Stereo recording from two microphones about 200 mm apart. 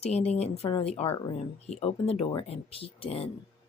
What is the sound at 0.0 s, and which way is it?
Speech, 30° left (ahead or behind).